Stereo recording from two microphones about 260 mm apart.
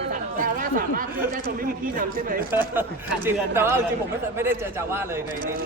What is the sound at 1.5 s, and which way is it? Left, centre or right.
Speech, right.